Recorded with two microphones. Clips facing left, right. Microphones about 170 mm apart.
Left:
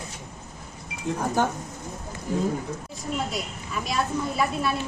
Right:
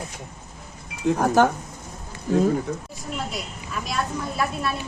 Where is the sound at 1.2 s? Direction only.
90° right.